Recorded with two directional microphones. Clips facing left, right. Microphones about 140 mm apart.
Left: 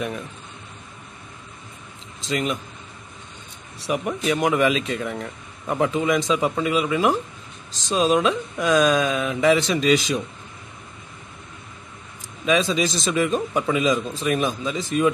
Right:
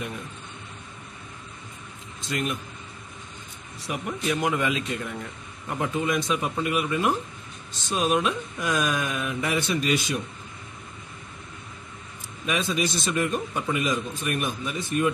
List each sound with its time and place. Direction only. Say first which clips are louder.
2.2 s speech: left 4 dB; 85° left
3.8 s speech: left 5 dB; 80° left
12.4 s speech: left 6 dB; 90° left